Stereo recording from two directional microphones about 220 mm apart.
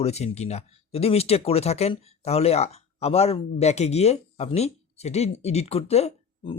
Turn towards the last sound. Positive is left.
turn(degrees=25)  # may be behind; listen again after turning